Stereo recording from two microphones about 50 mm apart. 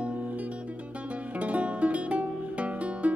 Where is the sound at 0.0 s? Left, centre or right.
Right.